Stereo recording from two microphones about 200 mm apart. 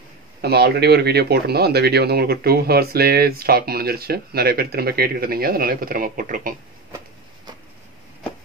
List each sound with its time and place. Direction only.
0.4 s speech: 55° right (ahead or behind)